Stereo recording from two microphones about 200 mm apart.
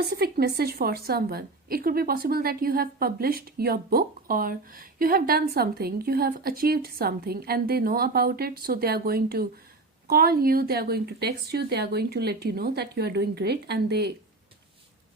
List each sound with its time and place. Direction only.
0.1 s a woman's voice: 50° right (ahead or behind)